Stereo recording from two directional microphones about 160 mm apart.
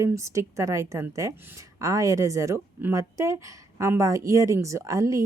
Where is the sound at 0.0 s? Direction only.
20° right (ahead or behind).